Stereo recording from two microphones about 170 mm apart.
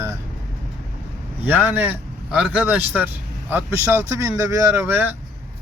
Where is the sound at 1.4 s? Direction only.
10° right (ahead or behind).